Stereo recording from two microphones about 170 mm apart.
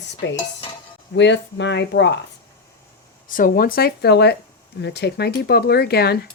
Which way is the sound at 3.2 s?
55° left (ahead or behind).